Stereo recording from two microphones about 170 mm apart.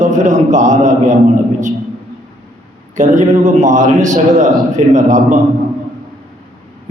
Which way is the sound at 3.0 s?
45° right (ahead or behind).